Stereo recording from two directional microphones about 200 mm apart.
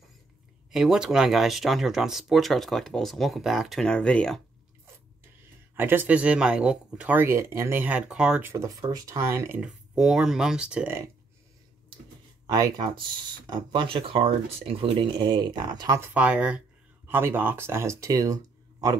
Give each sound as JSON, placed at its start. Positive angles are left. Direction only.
{"t": 0.7, "sound": "speech", "side_deg": 0}
{"t": 5.8, "sound": "speech", "side_deg": -10}
{"t": 12.4, "sound": "speech", "side_deg": -15}
{"t": 16.1, "sound": "speech", "side_deg": -5}